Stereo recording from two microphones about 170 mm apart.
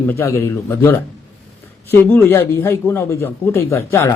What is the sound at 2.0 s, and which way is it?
A man's voice, 10° left (ahead or behind).